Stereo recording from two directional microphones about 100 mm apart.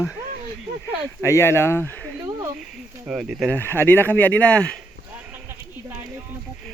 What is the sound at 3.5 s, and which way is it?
Speech, 20° left (ahead or behind).